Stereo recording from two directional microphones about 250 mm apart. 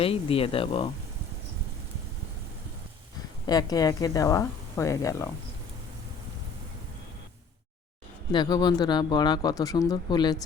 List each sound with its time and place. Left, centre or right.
0.0 s speech: left
3.4 s speech: centre
8.3 s speech: centre